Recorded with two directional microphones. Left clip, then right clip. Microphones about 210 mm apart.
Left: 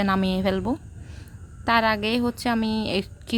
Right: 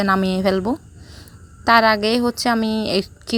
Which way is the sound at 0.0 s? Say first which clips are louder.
Right 5 dB; 20° right (ahead or behind).